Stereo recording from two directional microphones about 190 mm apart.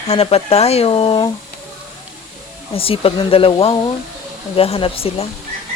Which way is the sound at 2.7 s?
30° left (ahead or behind).